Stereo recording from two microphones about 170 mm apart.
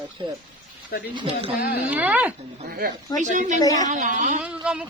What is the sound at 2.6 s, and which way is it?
Speech, 65° right (ahead or behind).